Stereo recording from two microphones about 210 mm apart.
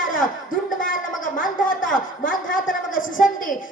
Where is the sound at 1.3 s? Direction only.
40° left (ahead or behind).